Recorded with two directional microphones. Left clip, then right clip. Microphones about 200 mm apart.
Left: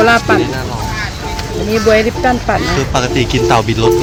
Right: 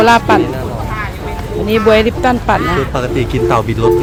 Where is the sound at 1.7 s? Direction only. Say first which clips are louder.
Right 1 dB; 15° right (ahead or behind).